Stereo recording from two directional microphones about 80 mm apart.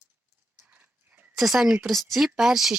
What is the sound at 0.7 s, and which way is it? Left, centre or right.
Dog, right.